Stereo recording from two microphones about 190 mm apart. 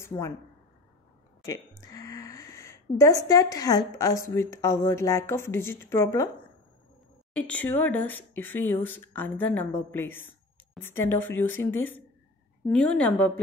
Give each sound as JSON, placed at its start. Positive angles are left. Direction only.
{"t": 0.1, "sound": "speech", "side_deg": 20}
{"t": 1.9, "sound": "a woman's voice", "side_deg": 15}
{"t": 7.3, "sound": "a woman's voice", "side_deg": 5}